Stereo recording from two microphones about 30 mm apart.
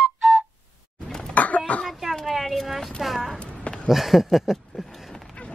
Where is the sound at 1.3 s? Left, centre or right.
Left.